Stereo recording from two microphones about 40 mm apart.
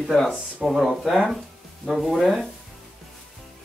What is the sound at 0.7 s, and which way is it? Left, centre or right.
Speech, centre.